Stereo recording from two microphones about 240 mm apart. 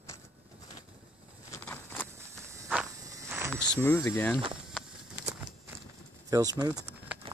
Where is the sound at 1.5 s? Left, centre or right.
Centre.